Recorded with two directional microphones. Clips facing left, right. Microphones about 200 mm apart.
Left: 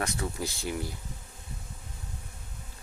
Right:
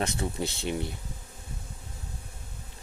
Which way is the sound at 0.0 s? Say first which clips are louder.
Right 2 dB; 25° right (ahead or behind).